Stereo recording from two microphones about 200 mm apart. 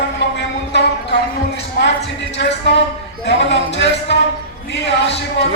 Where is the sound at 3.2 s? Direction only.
60° left (ahead or behind).